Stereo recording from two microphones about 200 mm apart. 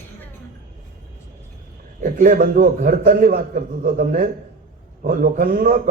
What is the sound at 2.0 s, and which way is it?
A man's voice, 45° right (ahead or behind).